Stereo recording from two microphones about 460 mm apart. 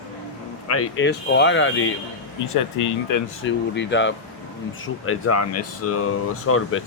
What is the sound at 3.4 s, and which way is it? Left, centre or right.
Speech, left.